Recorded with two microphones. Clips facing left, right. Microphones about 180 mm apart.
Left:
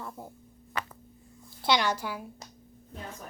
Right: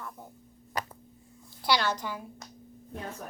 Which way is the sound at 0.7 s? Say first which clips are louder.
Right 1 dB; 40° right (ahead or behind).